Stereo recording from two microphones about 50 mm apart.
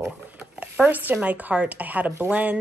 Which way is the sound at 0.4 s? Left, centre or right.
Right.